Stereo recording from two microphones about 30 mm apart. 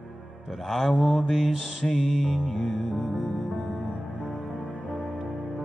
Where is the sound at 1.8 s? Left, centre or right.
Left.